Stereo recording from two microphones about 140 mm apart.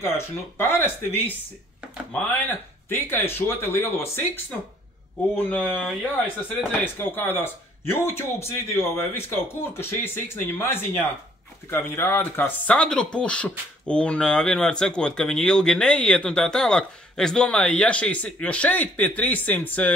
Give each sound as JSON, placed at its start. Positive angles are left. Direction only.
{"t": 0.6, "sound": "speech", "side_deg": 15}
{"t": 2.9, "sound": "speech", "side_deg": 15}
{"t": 5.3, "sound": "speech", "side_deg": 10}